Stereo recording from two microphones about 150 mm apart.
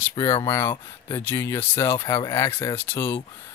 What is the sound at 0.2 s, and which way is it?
Speech, 20° left (ahead or behind).